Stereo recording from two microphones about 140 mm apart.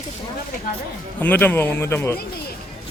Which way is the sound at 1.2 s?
15° left (ahead or behind).